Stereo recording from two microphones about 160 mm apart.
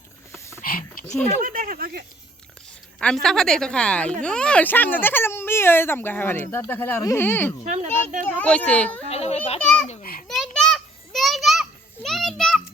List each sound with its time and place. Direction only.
0.3 s a sound: 15° left (ahead or behind)
0.6 s a sound: 60° left (ahead or behind)
1.4 s speech: 65° right (ahead or behind)
3.0 s a woman's voice: 5° left (ahead or behind)
7.6 s speech: 50° right (ahead or behind)
8.3 s speech: 10° left (ahead or behind)
9.0 s a child's voice: 40° left (ahead or behind)
10.0 s a child's voice: 65° left (ahead or behind)
10.2 s a sound: centre (ahead or behind)
12.0 s children playing: centre (ahead or behind)